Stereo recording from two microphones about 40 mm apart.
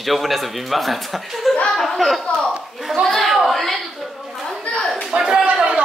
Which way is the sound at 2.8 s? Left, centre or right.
Centre.